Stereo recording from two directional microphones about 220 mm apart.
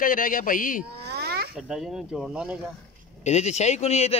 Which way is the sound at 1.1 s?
50° right (ahead or behind).